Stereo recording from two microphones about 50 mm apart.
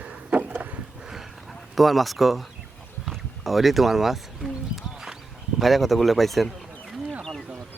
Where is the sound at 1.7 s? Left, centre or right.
Centre.